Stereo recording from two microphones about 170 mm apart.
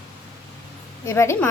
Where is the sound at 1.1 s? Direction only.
15° left (ahead or behind).